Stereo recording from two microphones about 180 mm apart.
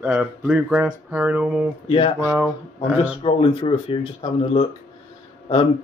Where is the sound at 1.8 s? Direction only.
30° left (ahead or behind).